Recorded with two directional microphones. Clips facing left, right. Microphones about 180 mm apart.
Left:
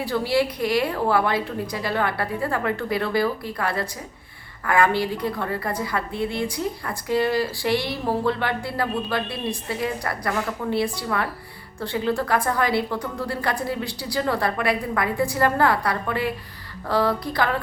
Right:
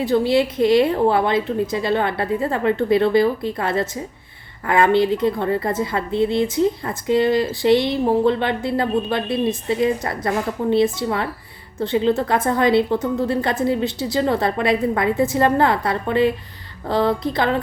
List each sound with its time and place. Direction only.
0.0 s a woman's voice: 20° right (ahead or behind)